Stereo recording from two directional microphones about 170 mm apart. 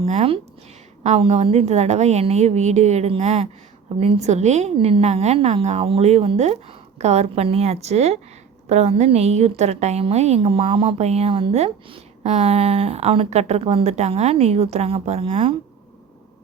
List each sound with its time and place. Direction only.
0.0 s a woman's voice: 35° right (ahead or behind)